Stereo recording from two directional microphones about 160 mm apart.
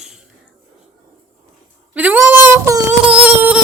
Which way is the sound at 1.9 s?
10° right (ahead or behind).